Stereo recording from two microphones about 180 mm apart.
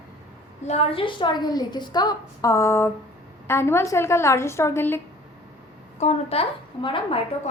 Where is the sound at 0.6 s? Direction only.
35° left (ahead or behind); by 5.0 s 15° left (ahead or behind).